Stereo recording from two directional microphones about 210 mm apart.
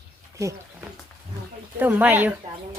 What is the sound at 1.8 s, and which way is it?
Speech, 10° right (ahead or behind).